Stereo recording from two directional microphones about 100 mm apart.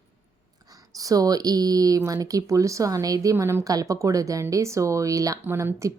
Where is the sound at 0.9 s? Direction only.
35° right (ahead or behind).